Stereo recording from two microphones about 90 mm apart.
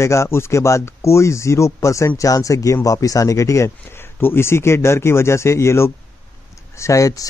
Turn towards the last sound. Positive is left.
turn(degrees=35)  # may be behind; listen again after turning